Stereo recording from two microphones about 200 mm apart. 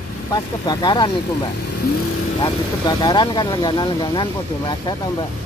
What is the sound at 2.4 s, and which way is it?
Speech, 20° left (ahead or behind).